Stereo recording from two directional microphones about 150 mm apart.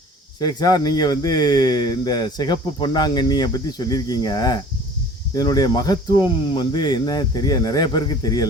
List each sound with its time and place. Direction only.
0.3 s speech: 25° left (ahead or behind)